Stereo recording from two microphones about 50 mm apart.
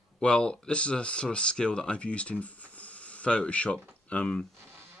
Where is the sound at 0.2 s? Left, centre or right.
Left.